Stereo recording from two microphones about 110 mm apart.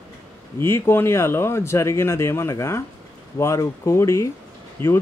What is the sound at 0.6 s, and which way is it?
A man's voice, 25° left (ahead or behind).